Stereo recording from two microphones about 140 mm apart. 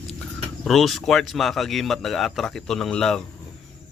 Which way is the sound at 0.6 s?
Centre (ahead or behind).